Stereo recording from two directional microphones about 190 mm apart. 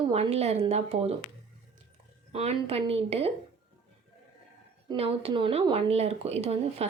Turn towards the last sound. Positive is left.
turn(degrees=-35)  # may be behind; listen again after turning